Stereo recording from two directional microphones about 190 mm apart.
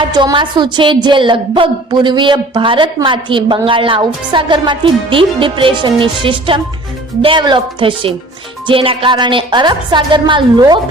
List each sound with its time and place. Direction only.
0.1 s a woman's voice: 20° right (ahead or behind)